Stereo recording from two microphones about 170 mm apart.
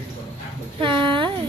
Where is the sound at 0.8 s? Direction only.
30° right (ahead or behind).